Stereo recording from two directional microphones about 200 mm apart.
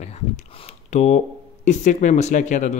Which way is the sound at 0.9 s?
35° left (ahead or behind).